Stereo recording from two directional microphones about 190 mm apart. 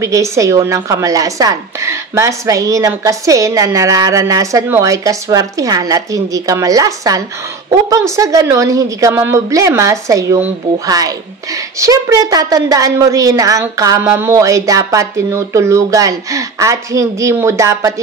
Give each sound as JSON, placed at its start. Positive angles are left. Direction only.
{"t": 0.0, "sound": "a woman's voice", "side_deg": -15}